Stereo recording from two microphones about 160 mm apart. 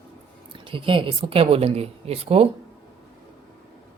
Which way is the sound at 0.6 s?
35° right (ahead or behind).